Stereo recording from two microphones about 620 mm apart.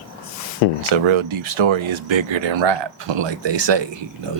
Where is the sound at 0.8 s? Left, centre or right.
Right.